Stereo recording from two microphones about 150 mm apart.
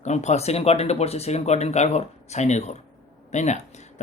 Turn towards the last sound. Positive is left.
turn(degrees=50)  # may be behind; listen again after turning